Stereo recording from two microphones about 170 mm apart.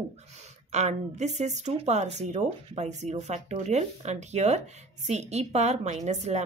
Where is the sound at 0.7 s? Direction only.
40° right (ahead or behind).